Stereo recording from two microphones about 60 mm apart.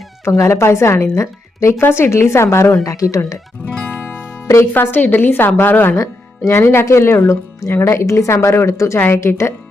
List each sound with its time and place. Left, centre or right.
0.3 s a woman's voice: left
3.8 s music: left
4.7 s a woman's voice: left
6.0 s a woman's voice: left